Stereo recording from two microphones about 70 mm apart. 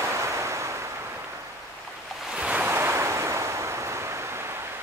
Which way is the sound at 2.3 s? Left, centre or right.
Right.